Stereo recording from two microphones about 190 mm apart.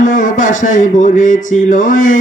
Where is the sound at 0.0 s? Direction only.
45° left (ahead or behind).